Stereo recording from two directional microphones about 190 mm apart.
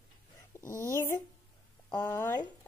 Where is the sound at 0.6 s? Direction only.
45° left (ahead or behind).